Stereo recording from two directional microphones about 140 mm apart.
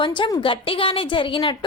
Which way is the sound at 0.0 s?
35° left (ahead or behind).